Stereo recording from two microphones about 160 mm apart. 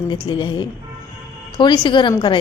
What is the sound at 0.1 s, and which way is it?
A woman's voice, 30° left (ahead or behind).